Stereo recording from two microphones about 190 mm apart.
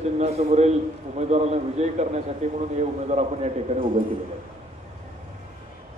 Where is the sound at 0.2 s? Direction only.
35° right (ahead or behind).